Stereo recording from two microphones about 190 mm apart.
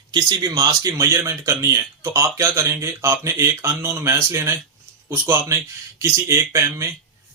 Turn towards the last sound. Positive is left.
turn(degrees=-15)  # may be behind; listen again after turning